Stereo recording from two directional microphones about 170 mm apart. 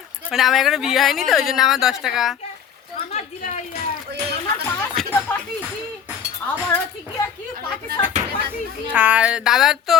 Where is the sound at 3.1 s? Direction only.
45° left (ahead or behind).